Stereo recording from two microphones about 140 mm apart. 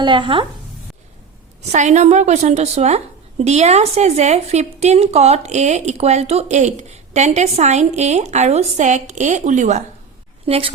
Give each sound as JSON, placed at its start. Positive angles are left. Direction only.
{"t": 0.0, "sound": "speech", "side_deg": -35}
{"t": 1.7, "sound": "a woman's voice", "side_deg": -55}
{"t": 10.4, "sound": "speech", "side_deg": -40}